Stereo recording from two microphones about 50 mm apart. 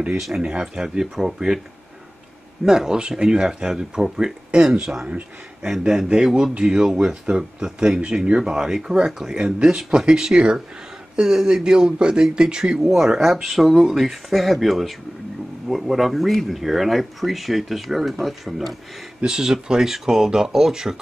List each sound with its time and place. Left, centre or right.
0.4 s speech: centre
2.6 s speech: centre
5.7 s speech: centre
19.2 s speech: centre